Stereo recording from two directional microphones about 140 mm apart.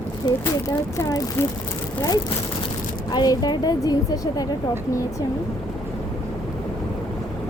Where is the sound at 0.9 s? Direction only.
20° left (ahead or behind).